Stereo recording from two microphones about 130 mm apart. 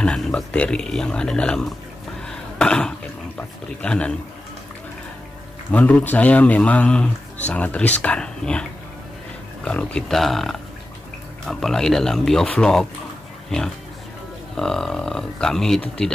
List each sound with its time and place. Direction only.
0.0 s speech: 5° left (ahead or behind)
2.2 s a sound: 5° left (ahead or behind)
3.3 s speech: 10° left (ahead or behind)
5.7 s speech: 10° left (ahead or behind)
9.7 s speech: 5° left (ahead or behind)
14.6 s speech: 5° left (ahead or behind)